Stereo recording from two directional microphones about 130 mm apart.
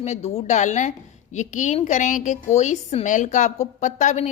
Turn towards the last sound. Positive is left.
turn(degrees=65)  # may be behind; listen again after turning